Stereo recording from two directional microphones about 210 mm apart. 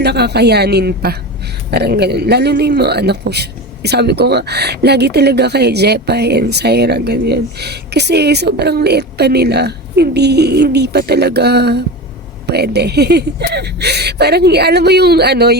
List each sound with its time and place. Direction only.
0.0 s a man's voice: 50° right (ahead or behind)